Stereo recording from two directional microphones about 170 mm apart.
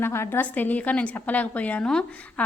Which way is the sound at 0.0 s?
15° left (ahead or behind).